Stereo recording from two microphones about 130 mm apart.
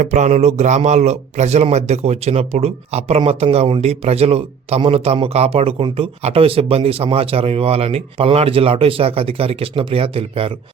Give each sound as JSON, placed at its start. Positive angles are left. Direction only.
{"t": 0.0, "sound": "a man's voice", "side_deg": -65}